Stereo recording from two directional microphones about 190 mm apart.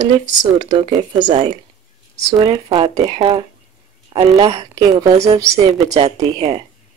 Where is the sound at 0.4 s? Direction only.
25° right (ahead or behind).